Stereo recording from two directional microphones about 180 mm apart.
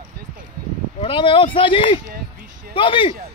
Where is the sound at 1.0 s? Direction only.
30° left (ahead or behind).